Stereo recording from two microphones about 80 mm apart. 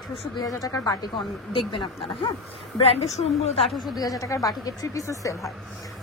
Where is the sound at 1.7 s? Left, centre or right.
Left.